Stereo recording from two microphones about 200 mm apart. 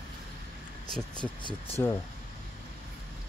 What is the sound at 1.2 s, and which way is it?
Speech, 25° left (ahead or behind).